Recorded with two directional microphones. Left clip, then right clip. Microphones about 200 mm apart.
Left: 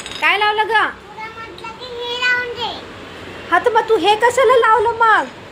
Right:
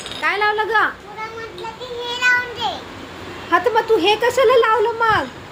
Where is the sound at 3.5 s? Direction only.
5° right (ahead or behind).